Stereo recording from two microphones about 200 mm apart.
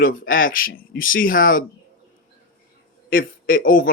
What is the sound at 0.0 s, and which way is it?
A man's voice, 45° left (ahead or behind).